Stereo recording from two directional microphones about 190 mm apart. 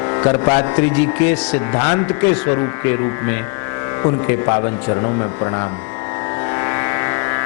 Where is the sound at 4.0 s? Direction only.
25° left (ahead or behind).